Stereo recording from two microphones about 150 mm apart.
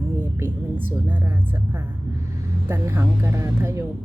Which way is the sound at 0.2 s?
15° right (ahead or behind).